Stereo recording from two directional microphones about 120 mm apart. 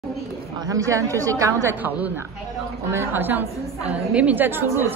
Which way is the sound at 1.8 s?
15° right (ahead or behind).